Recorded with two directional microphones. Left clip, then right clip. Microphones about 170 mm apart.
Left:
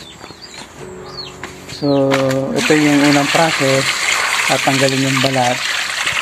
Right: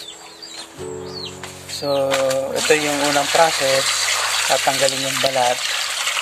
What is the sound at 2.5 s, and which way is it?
Speech, 10° right (ahead or behind).